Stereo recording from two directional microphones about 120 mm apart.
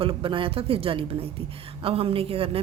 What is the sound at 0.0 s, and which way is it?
A woman's voice, 50° right (ahead or behind).